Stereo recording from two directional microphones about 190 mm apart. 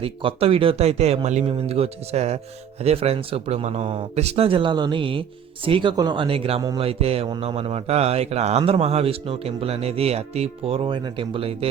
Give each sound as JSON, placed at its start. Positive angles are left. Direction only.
{"t": 0.0, "sound": "speech", "side_deg": -30}